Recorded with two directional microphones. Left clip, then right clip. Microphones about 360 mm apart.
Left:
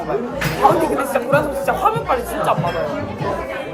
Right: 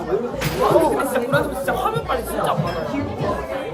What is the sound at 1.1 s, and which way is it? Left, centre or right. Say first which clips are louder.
Chatter: left 3 dB; centre.